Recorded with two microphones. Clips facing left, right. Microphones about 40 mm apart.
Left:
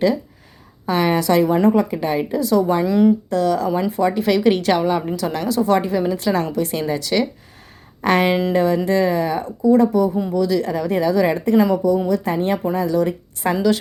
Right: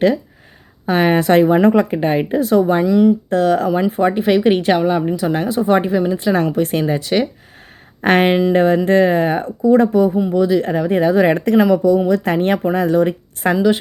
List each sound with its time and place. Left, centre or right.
0.9 s speech: right
1.6 s speech: right
2.0 s speech: right
2.8 s speech: centre
3.2 s speech: right
3.7 s speech: right
4.8 s speech: centre
6.3 s speech: right
10.4 s speech: right